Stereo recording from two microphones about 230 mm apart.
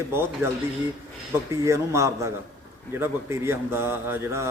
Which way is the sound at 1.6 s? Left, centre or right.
Centre.